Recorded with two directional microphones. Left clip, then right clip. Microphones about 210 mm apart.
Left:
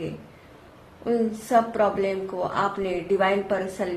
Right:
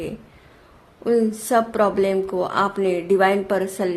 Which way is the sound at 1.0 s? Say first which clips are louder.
Right 5 dB; 55° right (ahead or behind).